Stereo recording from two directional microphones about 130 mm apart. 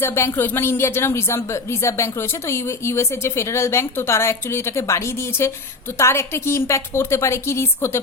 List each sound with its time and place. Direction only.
0.0 s a woman's voice: 20° left (ahead or behind)